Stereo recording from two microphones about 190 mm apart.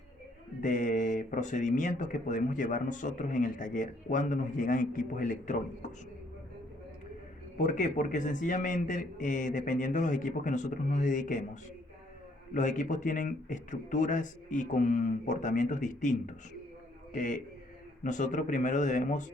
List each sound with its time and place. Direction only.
0.6 s speech: 40° left (ahead or behind)
7.6 s a man's voice: 40° left (ahead or behind)
12.5 s a man's voice: 40° left (ahead or behind)